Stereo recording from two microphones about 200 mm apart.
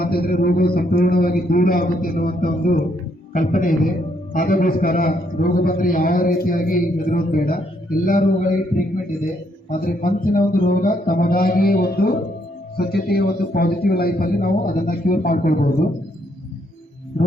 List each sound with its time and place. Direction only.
0.0 s a man's voice: 50° left (ahead or behind)
9.6 s a man's voice: 45° left (ahead or behind)